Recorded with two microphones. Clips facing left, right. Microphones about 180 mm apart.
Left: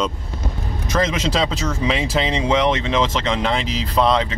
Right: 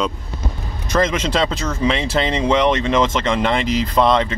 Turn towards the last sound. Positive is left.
turn(degrees=0)  # may be behind; listen again after turning